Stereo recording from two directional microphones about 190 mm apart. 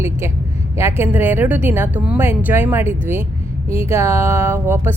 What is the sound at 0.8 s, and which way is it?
Mantra, 15° right (ahead or behind).